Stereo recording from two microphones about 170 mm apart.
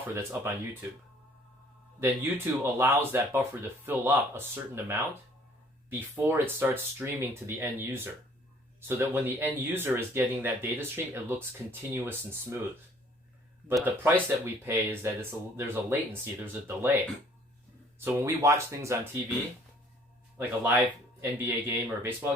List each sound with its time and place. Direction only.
0.1 s speech: 15° right (ahead or behind)
2.0 s speech: 15° right (ahead or behind)
13.7 s speech: 10° right (ahead or behind)
18.0 s speech: 15° right (ahead or behind)
20.4 s speech: 10° right (ahead or behind)